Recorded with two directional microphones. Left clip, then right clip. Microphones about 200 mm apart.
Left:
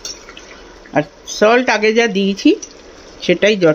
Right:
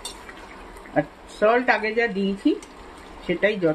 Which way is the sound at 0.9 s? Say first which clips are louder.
Left 8 dB; 40° left (ahead or behind).